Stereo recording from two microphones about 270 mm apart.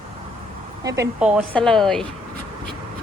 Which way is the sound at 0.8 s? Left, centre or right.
Centre.